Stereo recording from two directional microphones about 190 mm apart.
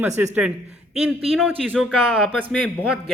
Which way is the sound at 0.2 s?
5° right (ahead or behind).